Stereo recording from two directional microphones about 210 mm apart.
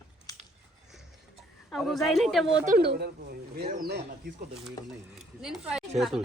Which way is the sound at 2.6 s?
45° right (ahead or behind).